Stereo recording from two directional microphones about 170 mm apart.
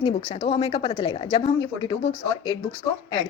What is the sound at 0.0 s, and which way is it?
A woman's voice, 30° left (ahead or behind).